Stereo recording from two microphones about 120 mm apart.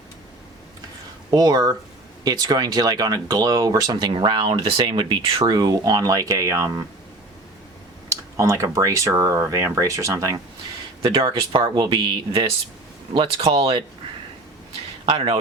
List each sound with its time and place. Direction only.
1.3 s speech: 30° right (ahead or behind)
8.1 s speech: 25° right (ahead or behind)
11.0 s speech: 50° right (ahead or behind)
15.0 s speech: 40° right (ahead or behind)